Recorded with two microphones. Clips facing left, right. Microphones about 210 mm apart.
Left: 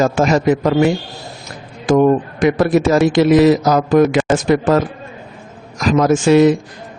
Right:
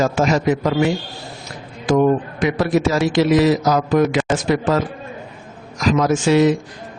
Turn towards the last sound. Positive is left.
turn(degrees=55)  # may be behind; listen again after turning